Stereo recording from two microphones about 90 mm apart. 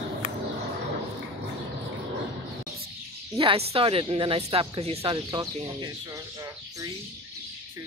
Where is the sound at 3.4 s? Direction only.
90° right; by 5.9 s 60° right (ahead or behind).